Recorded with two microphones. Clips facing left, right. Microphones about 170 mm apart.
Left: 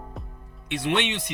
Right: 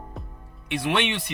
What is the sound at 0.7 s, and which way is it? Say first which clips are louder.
Speech: right 1 dB; 20° left (ahead or behind).